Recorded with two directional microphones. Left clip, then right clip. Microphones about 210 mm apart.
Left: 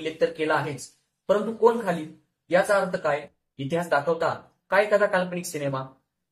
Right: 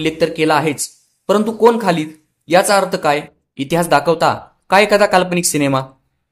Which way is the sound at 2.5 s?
40° right (ahead or behind).